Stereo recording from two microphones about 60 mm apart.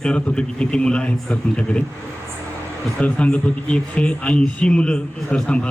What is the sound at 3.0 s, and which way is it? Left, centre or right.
Speech, left.